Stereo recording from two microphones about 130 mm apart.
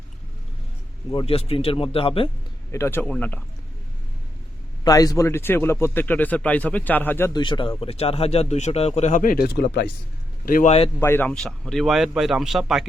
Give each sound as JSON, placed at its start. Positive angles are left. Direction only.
{"t": 1.1, "sound": "speech", "side_deg": 45}
{"t": 2.7, "sound": "speech", "side_deg": 20}
{"t": 4.8, "sound": "speech", "side_deg": 30}
{"t": 7.3, "sound": "speech", "side_deg": 40}
{"t": 10.4, "sound": "a man's voice", "side_deg": 90}
{"t": 11.0, "sound": "speech", "side_deg": 15}
{"t": 11.3, "sound": "speech", "side_deg": 5}